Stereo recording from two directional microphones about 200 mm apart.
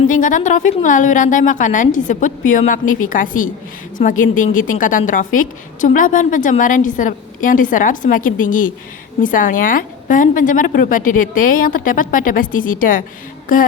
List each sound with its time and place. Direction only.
0.1 s a woman's voice: 40° left (ahead or behind)